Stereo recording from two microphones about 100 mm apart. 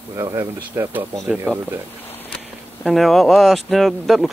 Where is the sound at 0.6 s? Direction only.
20° right (ahead or behind).